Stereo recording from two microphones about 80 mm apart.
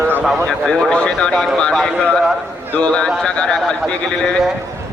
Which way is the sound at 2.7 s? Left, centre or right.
Centre.